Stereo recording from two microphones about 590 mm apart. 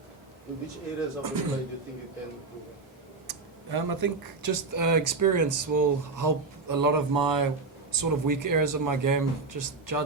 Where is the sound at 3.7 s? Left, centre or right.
Right.